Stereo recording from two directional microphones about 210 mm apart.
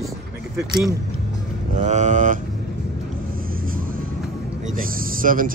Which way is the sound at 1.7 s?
35° right (ahead or behind).